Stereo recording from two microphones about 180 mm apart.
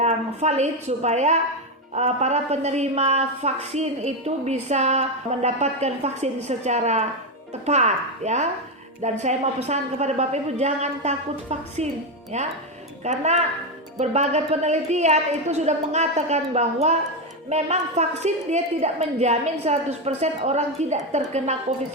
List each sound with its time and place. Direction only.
0.0 s a woman's voice: 40° right (ahead or behind)